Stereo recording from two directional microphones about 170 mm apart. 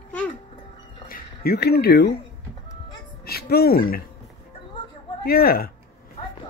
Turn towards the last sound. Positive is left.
turn(degrees=60)  # may be behind; listen again after turning